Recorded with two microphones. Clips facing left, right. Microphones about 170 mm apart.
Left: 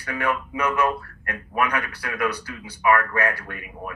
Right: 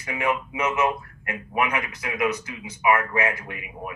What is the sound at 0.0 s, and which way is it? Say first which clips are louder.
Speech: even; 20° right (ahead or behind).